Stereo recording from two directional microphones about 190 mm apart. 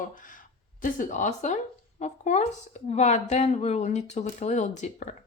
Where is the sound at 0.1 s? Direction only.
45° left (ahead or behind).